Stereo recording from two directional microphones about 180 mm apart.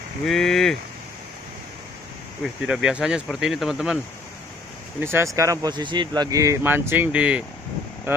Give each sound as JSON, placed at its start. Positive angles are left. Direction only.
{"t": 0.3, "sound": "speech", "side_deg": 0}
{"t": 2.4, "sound": "speech", "side_deg": -5}
{"t": 4.9, "sound": "speech", "side_deg": -15}